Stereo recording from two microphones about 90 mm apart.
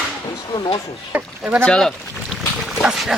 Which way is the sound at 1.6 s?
10° left (ahead or behind).